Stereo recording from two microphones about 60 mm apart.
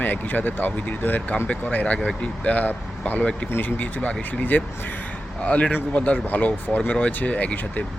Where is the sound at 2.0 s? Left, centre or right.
Centre.